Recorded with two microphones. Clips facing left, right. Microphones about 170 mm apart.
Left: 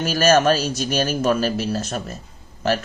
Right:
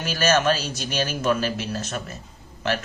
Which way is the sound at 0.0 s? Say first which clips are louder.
Left 5 dB; 40° left (ahead or behind).